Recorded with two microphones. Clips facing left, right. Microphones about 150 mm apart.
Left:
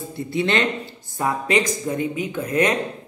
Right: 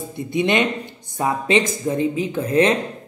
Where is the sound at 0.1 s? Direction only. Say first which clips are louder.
Right 2 dB; 20° right (ahead or behind).